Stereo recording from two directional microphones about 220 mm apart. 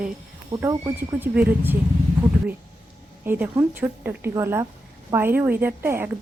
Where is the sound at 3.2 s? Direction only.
10° right (ahead or behind).